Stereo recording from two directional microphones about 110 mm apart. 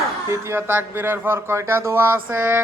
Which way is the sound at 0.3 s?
25° right (ahead or behind).